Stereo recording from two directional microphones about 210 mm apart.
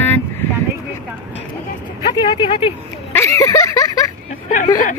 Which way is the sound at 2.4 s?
25° left (ahead or behind).